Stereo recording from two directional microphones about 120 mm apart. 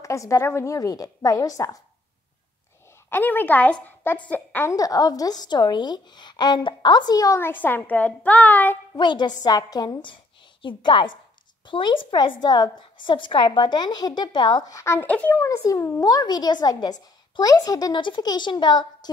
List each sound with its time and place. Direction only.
0.0 s a woman's voice: 25° left (ahead or behind)
3.1 s a child's voice: 15° left (ahead or behind)
4.6 s a woman's voice: 30° left (ahead or behind)
7.3 s a child's voice: 15° left (ahead or behind)
8.9 s a woman's voice: 40° left (ahead or behind)
15.0 s a child's voice: 10° left (ahead or behind)
15.3 s a woman's voice: 25° left (ahead or behind)